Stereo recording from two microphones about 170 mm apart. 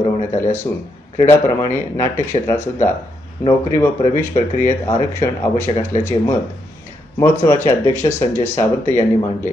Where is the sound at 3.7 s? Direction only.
15° left (ahead or behind).